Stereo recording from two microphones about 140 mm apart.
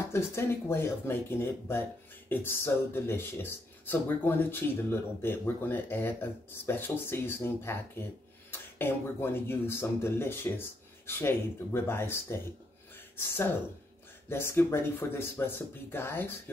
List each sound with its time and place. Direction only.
0.1 s speech: 20° left (ahead or behind)